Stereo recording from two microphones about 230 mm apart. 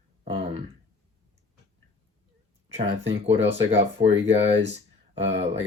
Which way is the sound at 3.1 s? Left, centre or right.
Right.